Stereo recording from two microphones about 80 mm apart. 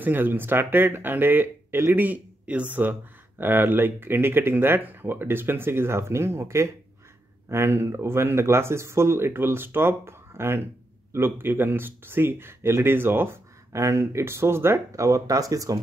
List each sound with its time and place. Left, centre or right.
0.0 s speech: right
14.9 s speech: right